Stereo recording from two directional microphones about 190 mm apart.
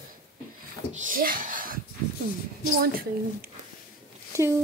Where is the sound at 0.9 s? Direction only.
45° right (ahead or behind).